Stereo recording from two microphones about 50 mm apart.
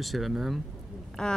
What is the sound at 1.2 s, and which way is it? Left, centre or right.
Speech, centre.